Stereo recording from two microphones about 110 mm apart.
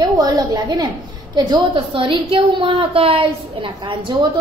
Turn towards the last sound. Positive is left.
turn(degrees=-50)  # may be behind; listen again after turning